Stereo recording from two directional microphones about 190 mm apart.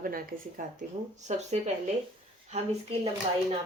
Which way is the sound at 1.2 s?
40° right (ahead or behind).